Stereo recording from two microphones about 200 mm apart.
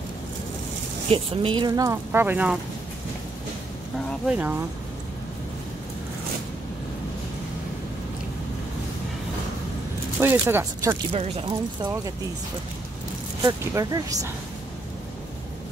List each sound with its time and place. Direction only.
1.1 s speech: 25° right (ahead or behind); by 2.6 s 5° right (ahead or behind)
4.3 s speech: 10° right (ahead or behind)
10.2 s speech: 15° right (ahead or behind)
11.1 s speech: 30° right (ahead or behind)
13.4 s speech: 15° right (ahead or behind)